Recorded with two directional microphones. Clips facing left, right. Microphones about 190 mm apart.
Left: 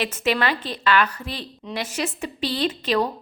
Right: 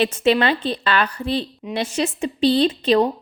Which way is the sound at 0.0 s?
30° right (ahead or behind).